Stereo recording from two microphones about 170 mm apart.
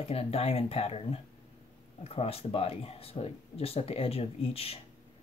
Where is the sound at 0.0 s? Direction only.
35° left (ahead or behind).